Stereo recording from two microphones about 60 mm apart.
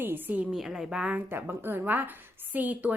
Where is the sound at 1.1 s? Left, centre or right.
Right.